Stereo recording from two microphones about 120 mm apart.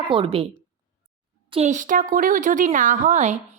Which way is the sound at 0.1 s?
50° right (ahead or behind).